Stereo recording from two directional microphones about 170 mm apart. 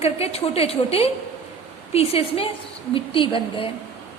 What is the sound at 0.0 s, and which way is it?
A woman's voice, 35° left (ahead or behind).